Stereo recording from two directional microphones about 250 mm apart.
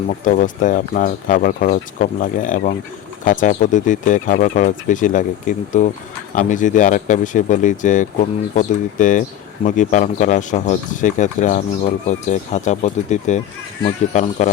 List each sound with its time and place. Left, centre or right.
0.3 s speech: left